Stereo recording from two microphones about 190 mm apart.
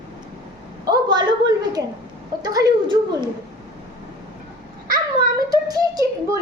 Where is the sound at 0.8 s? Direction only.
20° right (ahead or behind).